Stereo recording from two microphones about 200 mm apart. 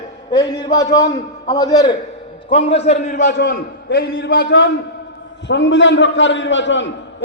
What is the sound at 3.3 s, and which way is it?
A man's voice, 60° left (ahead or behind).